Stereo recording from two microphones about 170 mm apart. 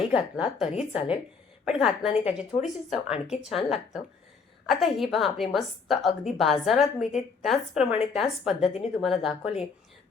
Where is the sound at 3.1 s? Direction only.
40° left (ahead or behind).